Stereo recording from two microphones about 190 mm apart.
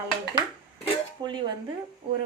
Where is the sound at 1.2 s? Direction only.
25° right (ahead or behind).